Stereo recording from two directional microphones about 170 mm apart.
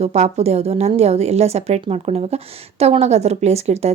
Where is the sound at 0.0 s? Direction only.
40° right (ahead or behind).